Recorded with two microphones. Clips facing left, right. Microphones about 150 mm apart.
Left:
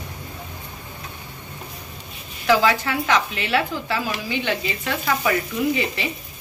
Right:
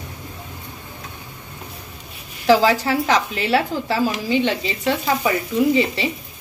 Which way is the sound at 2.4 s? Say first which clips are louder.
Right 3 dB; 35° right (ahead or behind).